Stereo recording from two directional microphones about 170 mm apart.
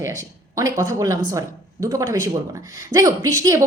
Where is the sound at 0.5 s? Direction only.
20° right (ahead or behind).